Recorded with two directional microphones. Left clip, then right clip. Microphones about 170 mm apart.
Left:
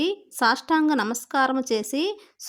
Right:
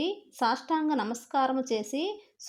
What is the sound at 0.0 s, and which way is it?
A woman's voice, 20° left (ahead or behind).